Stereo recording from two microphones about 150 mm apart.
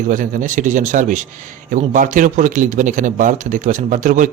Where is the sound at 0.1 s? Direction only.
60° right (ahead or behind).